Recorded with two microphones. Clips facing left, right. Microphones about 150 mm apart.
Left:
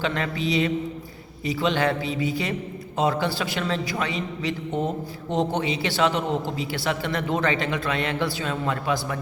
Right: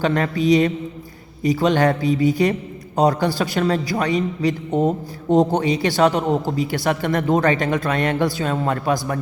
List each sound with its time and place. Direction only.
0.0 s a man's voice: 45° right (ahead or behind)